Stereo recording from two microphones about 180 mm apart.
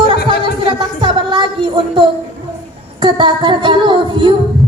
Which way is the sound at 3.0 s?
25° right (ahead or behind).